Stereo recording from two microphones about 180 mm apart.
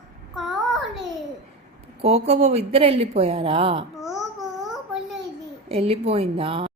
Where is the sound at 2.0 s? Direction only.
35° right (ahead or behind).